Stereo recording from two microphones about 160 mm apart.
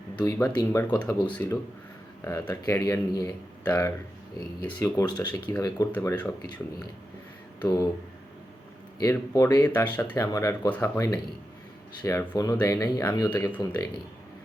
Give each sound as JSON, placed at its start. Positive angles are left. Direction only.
{"t": 0.3, "sound": "speech", "side_deg": 20}
{"t": 5.3, "sound": "speech", "side_deg": 15}
{"t": 7.6, "sound": "speech", "side_deg": 20}
{"t": 9.0, "sound": "speech", "side_deg": 20}
{"t": 9.6, "sound": "speech", "side_deg": 10}
{"t": 12.3, "sound": "speech", "side_deg": 20}